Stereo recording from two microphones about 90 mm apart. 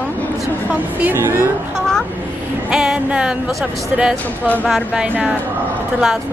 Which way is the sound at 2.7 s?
10° right (ahead or behind).